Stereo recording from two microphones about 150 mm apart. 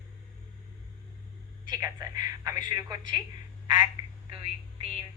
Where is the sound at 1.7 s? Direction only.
25° right (ahead or behind).